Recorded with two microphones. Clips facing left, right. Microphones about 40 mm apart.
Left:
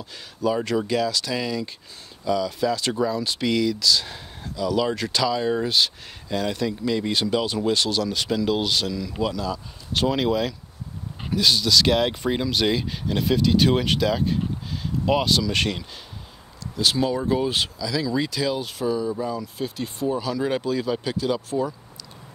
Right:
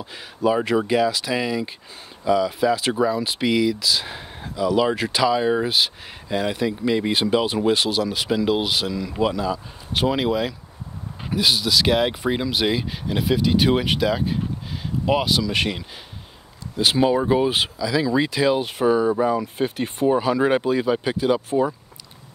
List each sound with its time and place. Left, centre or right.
0.0 s speech: right
16.7 s speech: right